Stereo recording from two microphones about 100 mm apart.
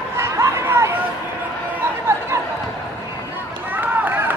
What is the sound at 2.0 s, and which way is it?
Chatter, 25° right (ahead or behind).